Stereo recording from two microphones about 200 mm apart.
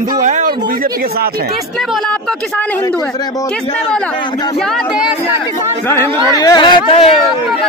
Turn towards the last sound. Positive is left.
turn(degrees=30)  # may be behind; listen again after turning